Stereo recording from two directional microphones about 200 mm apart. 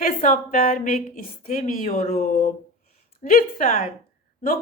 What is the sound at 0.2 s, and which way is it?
A woman's voice, 40° left (ahead or behind).